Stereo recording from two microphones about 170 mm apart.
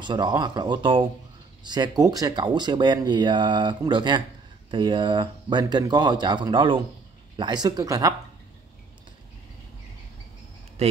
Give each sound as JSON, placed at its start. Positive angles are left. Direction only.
{"t": 0.0, "sound": "speech", "side_deg": -25}